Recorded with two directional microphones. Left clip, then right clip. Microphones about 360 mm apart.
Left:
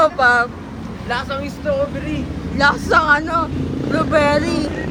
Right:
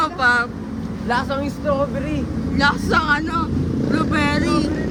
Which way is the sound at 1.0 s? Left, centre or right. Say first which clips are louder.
Right 1 dB; right.